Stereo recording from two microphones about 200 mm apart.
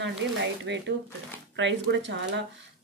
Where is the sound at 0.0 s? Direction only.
60° right (ahead or behind).